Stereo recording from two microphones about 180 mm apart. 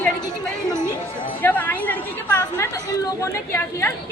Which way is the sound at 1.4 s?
10° left (ahead or behind).